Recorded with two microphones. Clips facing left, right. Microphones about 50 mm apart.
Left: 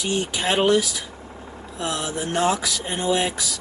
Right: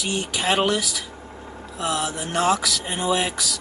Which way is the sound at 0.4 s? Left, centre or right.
Centre.